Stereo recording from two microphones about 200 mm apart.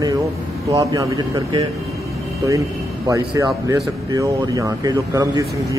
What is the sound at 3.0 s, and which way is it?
Speech, 15° right (ahead or behind).